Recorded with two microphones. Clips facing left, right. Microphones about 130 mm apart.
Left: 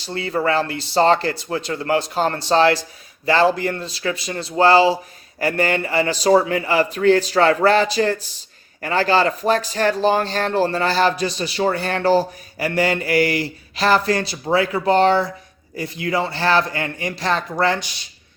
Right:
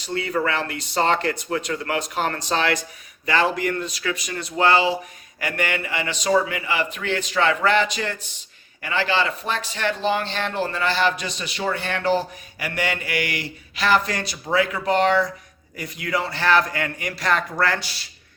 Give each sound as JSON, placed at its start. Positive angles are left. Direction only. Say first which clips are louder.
{"t": 0.0, "sound": "a man's voice", "louder": "left 2 dB", "side_deg": 30}